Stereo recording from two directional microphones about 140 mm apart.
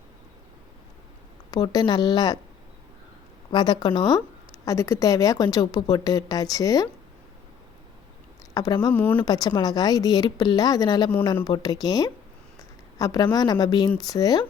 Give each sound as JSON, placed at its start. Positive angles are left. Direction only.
{"t": 1.5, "sound": "a woman's voice", "side_deg": 25}
{"t": 3.5, "sound": "a woman's voice", "side_deg": 30}
{"t": 8.5, "sound": "a woman's voice", "side_deg": 25}
{"t": 8.9, "sound": "speech", "side_deg": 15}
{"t": 9.2, "sound": "a woman's voice", "side_deg": 25}